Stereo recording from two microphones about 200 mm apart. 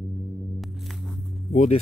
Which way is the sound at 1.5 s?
35° left (ahead or behind).